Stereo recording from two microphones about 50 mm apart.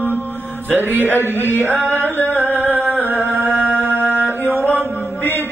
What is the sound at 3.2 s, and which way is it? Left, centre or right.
Music, left.